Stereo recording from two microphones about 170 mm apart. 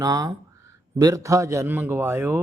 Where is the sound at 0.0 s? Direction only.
20° right (ahead or behind).